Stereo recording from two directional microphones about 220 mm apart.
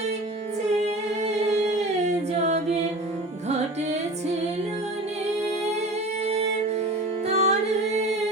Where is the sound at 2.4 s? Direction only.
30° right (ahead or behind).